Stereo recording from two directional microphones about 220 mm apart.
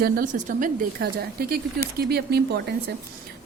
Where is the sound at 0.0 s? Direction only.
40° right (ahead or behind).